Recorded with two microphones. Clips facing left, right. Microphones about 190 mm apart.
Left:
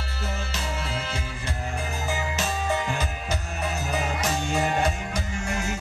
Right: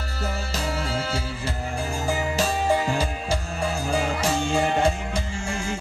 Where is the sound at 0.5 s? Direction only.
30° right (ahead or behind).